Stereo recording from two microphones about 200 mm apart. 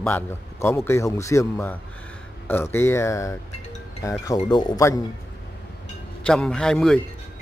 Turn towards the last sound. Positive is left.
turn(degrees=5)  # may be behind; listen again after turning